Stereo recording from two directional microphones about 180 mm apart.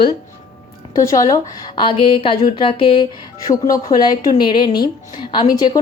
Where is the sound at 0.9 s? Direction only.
15° left (ahead or behind).